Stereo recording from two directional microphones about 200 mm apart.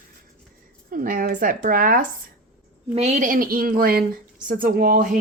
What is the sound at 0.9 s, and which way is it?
A woman's voice, 45° right (ahead or behind).